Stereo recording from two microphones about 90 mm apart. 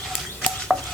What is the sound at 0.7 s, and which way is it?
Stir, 15° right (ahead or behind).